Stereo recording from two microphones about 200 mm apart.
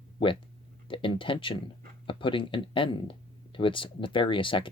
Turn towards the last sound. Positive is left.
turn(degrees=25)  # may be behind; listen again after turning